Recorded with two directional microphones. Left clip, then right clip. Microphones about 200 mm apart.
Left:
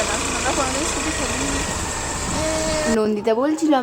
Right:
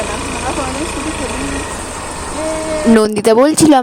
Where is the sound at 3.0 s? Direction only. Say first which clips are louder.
Right 12 dB; 60° right (ahead or behind).